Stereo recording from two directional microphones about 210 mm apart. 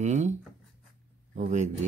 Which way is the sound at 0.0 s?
35° right (ahead or behind).